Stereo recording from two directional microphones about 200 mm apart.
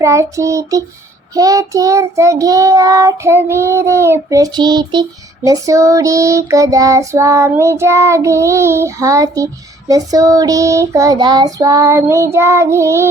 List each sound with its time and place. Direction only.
0.0 s child singing: 15° right (ahead or behind)